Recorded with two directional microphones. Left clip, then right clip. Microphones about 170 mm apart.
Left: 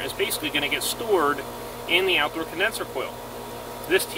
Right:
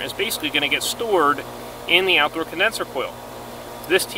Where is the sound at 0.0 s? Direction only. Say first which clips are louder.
Right 2 dB; 70° right (ahead or behind).